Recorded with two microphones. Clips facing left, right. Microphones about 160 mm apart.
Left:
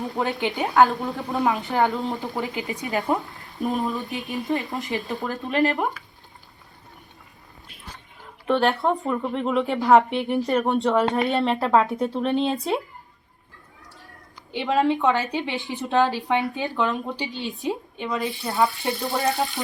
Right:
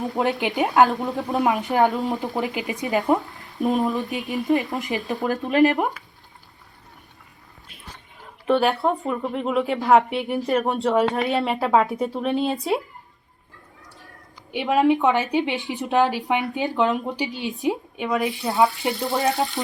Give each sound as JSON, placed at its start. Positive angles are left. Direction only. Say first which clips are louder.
{"t": 0.2, "sound": "speech", "louder": "right 3 dB", "side_deg": -20}
{"t": 8.4, "sound": "speech", "louder": "right 1 dB", "side_deg": 0}
{"t": 14.5, "sound": "speech", "louder": "right 3 dB", "side_deg": -15}